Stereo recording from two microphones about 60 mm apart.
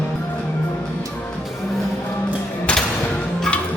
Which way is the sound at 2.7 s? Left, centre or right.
Centre.